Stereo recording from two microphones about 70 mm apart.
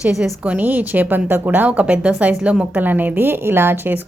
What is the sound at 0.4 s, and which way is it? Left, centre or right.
A woman's voice, right.